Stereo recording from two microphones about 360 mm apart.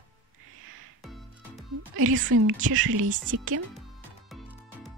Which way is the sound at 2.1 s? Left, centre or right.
Right.